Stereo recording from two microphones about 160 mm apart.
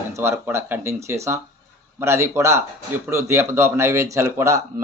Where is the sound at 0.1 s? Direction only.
15° right (ahead or behind).